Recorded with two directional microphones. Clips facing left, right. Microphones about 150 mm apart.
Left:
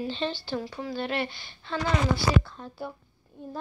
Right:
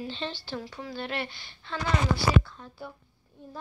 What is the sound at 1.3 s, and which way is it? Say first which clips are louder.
Speech: left 3 dB; 30° left (ahead or behind).